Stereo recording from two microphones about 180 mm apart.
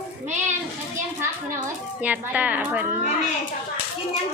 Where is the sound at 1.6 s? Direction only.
10° right (ahead or behind).